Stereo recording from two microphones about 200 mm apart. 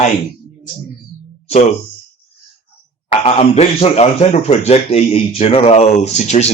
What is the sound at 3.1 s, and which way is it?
Speech, 30° left (ahead or behind).